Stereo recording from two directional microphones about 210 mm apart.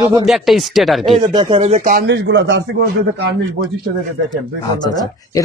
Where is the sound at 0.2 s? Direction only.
Centre (ahead or behind).